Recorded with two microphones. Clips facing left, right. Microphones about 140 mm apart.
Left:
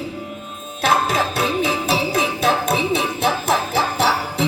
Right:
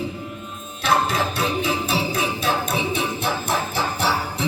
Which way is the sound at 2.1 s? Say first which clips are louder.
Left 4 dB; 90° left.